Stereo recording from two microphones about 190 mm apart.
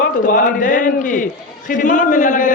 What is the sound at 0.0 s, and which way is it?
Speech, 45° left (ahead or behind).